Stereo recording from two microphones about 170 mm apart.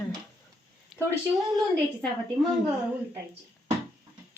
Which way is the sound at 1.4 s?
Centre (ahead or behind).